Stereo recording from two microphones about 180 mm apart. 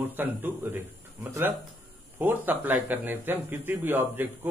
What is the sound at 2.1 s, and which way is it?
A man's voice, 10° right (ahead or behind).